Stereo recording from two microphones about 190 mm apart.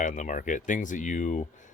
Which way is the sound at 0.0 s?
40° left (ahead or behind).